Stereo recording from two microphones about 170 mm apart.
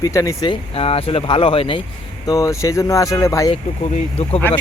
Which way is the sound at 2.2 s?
20° left (ahead or behind).